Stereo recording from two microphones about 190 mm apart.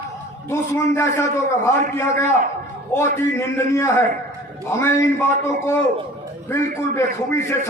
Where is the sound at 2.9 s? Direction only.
15° left (ahead or behind).